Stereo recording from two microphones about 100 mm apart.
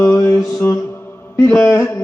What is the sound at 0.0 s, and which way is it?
Mantra, 25° left (ahead or behind).